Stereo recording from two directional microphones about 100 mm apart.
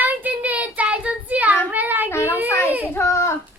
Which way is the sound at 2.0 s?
25° left (ahead or behind).